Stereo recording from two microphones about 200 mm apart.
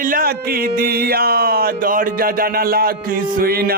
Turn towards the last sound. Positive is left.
turn(degrees=-50)  # may be behind; listen again after turning